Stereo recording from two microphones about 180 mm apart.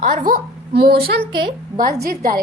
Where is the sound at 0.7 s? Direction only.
60° right (ahead or behind).